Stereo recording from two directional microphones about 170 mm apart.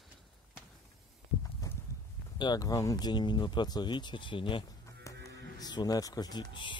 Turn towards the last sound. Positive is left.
turn(degrees=30)  # may be behind; listen again after turning